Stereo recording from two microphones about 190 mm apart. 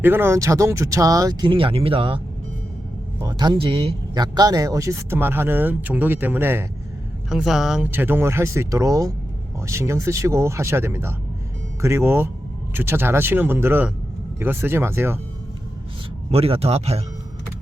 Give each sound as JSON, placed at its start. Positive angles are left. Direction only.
{"t": 0.0, "sound": "speech", "side_deg": -10}
{"t": 16.3, "sound": "speech", "side_deg": -30}